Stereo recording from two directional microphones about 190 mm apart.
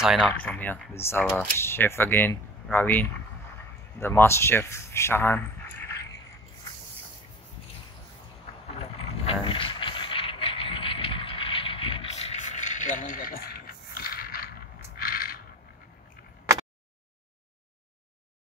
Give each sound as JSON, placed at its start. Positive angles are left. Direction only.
{"t": 0.4, "sound": "speech", "side_deg": 10}
{"t": 8.6, "sound": "vehicle", "side_deg": 30}
{"t": 15.0, "sound": "a sound", "side_deg": 50}